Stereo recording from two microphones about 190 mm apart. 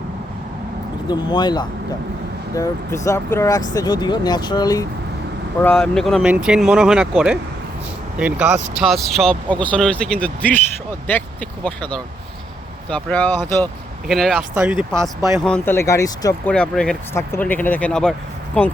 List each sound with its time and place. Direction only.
1.0 s speech: 20° left (ahead or behind); by 7.1 s 5° right (ahead or behind)
8.4 s speech: 35° right (ahead or behind)
8.8 s speech: centre (ahead or behind)
12.9 s speech: 5° left (ahead or behind)
15.4 s speech: 10° left (ahead or behind)
16.5 s speech: 5° left (ahead or behind)